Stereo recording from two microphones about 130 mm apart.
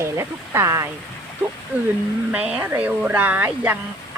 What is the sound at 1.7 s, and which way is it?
Speech, 10° right (ahead or behind).